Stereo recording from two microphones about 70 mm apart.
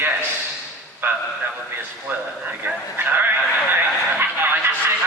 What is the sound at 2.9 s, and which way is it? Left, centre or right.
Speech, right.